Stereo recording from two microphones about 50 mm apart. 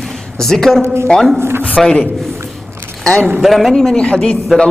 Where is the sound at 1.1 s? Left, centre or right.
Left.